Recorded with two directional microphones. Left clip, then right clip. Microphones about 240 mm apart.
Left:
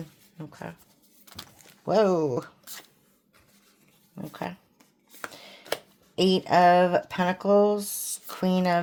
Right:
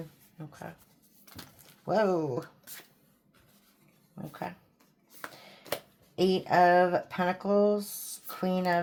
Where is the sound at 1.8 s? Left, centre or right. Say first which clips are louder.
Left 5 dB; left.